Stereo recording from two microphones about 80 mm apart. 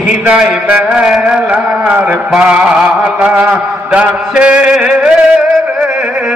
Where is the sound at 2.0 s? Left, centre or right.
Centre.